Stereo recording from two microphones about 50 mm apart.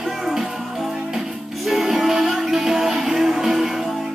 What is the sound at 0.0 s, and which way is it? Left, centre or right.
Music, centre.